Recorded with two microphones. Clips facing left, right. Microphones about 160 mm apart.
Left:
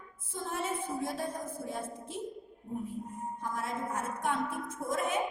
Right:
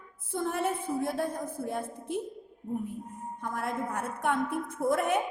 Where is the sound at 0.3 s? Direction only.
60° right (ahead or behind).